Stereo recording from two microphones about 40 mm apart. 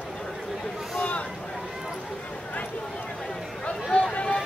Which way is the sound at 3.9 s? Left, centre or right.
Left.